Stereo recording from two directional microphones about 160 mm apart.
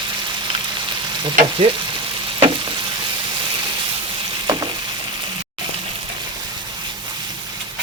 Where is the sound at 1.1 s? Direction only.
30° right (ahead or behind).